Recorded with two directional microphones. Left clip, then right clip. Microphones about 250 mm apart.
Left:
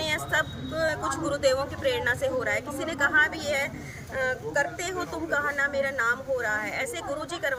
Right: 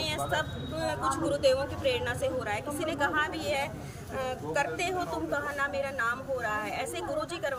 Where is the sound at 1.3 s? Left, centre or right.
Centre.